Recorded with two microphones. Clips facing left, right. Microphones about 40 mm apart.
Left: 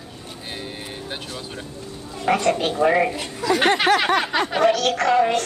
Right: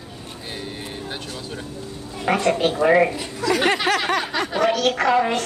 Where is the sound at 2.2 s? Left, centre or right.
Centre.